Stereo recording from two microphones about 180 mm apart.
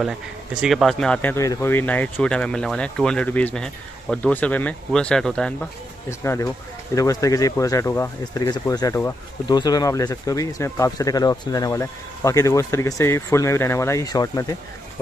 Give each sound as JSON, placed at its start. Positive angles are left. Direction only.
{"t": 0.6, "sound": "speech", "side_deg": 0}
{"t": 6.0, "sound": "speech", "side_deg": 15}